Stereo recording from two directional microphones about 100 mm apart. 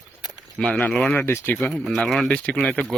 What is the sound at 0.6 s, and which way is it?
Speech, 10° left (ahead or behind).